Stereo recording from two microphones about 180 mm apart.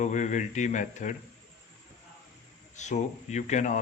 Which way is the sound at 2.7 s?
40° left (ahead or behind).